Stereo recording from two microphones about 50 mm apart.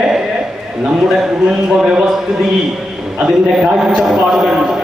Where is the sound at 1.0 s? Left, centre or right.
Centre.